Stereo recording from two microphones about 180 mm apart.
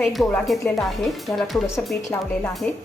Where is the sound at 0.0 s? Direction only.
Centre (ahead or behind).